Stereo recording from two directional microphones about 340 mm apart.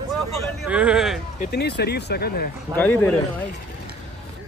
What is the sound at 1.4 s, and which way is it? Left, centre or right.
Speech, left.